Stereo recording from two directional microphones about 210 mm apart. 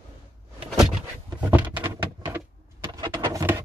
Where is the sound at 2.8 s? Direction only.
20° right (ahead or behind).